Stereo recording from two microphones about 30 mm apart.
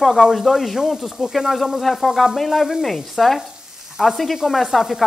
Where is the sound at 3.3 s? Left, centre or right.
Centre.